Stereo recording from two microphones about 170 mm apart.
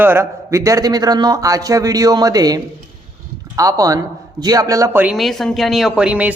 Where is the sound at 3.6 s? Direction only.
20° right (ahead or behind).